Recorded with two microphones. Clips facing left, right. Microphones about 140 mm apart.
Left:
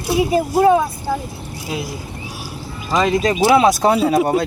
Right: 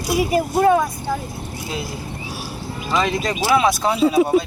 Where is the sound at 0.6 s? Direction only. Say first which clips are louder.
Left 2 dB; 15° left (ahead or behind).